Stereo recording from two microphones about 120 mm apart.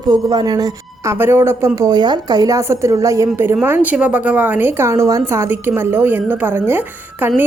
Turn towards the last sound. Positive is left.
turn(degrees=-15)  # may be behind; listen again after turning